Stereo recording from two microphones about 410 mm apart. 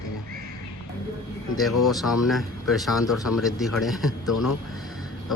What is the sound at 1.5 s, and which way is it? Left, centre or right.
Speech, centre.